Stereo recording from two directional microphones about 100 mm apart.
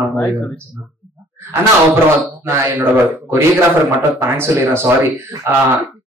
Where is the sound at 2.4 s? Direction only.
20° right (ahead or behind).